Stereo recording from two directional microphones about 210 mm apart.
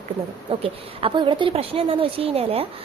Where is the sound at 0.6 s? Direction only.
25° right (ahead or behind).